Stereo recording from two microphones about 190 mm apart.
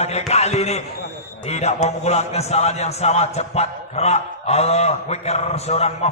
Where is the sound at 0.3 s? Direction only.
35° left (ahead or behind).